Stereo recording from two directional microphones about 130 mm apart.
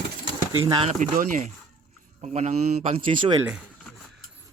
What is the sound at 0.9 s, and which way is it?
Speech, 80° right.